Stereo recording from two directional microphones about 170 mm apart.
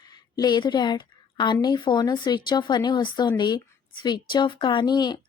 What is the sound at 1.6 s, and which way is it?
A woman's voice, 25° left (ahead or behind).